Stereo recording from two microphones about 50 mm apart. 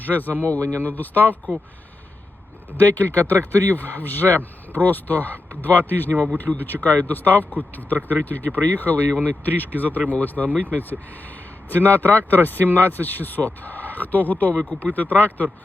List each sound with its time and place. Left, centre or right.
0.0 s speech: left
2.7 s speech: left